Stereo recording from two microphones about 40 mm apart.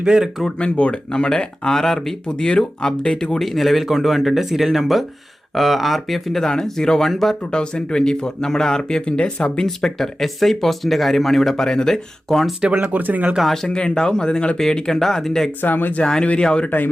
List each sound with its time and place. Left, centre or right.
0.0 s speech: centre
0.6 s speech: left; by 2.1 s centre
2.2 s speech: left
3.3 s speech: centre
7.5 s speech: left
9.6 s speech: centre
12.6 s speech: right
13.0 s speech: right
13.7 s speech: left
15.6 s speech: left
16.4 s speech: left
16.6 s speech: left